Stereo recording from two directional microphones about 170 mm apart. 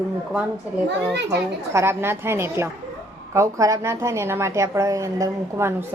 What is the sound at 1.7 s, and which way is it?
A woman's voice, 15° right (ahead or behind).